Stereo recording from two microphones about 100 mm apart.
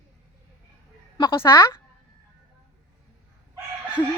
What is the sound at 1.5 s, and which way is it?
Speech, 40° left (ahead or behind).